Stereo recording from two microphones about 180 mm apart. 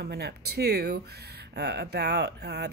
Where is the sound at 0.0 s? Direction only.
65° right (ahead or behind).